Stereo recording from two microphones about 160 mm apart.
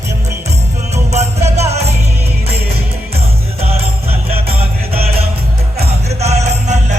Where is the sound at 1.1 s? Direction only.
45° right (ahead or behind).